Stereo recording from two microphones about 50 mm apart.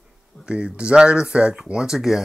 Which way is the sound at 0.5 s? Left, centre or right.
Centre.